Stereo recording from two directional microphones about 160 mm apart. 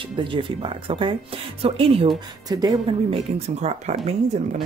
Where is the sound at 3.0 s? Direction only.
40° right (ahead or behind).